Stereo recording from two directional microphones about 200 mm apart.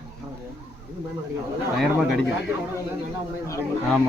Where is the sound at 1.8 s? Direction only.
Centre (ahead or behind).